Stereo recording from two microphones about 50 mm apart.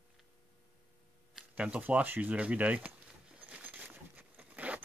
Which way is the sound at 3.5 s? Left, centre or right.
Right.